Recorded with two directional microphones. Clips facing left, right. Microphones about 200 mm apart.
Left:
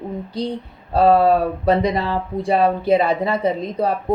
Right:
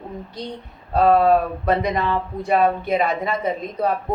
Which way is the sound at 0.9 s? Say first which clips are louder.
Left 1 dB; 30° left (ahead or behind).